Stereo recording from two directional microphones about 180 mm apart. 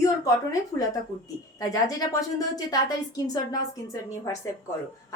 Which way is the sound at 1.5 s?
20° left (ahead or behind).